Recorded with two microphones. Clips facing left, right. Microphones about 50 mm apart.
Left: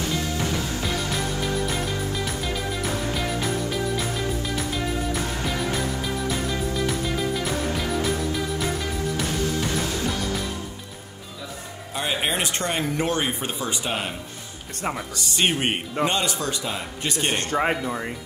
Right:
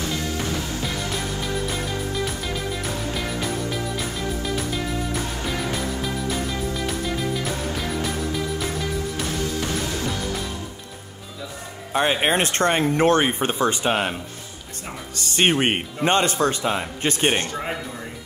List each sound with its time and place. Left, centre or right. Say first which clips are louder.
11.9 s speech: right 6 dB; right
15.1 s speech: right 6 dB; right
17.5 s speech: left 6 dB; left